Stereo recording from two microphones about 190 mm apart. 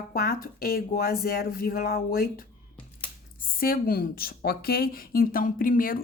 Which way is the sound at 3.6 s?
50° left (ahead or behind).